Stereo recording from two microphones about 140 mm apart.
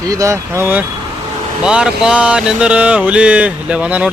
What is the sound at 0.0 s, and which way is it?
Speech, 25° right (ahead or behind).